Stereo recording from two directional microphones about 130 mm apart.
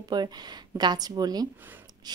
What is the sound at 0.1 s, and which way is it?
A woman's voice, 35° right (ahead or behind).